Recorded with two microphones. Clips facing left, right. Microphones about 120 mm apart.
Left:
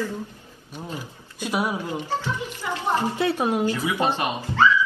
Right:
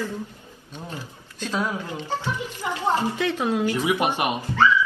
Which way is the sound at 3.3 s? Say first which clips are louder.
Left 1 dB; 15° left (ahead or behind).